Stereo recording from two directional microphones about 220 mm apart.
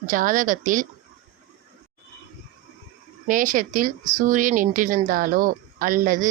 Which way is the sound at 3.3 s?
40° right (ahead or behind).